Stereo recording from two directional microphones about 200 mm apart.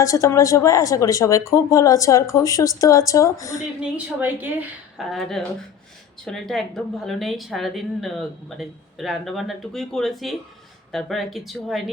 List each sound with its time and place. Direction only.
0.0 s speech: 15° left (ahead or behind)
3.9 s a woman's voice: 10° right (ahead or behind)